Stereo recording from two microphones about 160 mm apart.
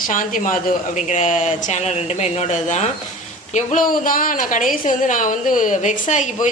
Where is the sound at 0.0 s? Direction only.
55° left (ahead or behind).